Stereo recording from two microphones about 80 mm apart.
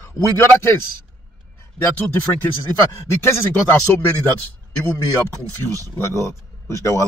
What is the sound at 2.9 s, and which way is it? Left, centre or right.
Speech, left.